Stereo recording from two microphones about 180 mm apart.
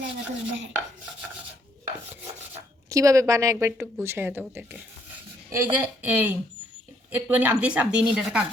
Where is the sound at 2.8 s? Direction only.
15° right (ahead or behind).